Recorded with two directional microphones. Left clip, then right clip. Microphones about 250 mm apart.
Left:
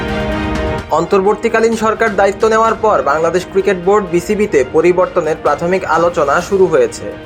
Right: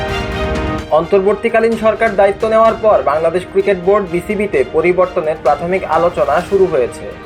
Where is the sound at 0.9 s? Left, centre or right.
Left.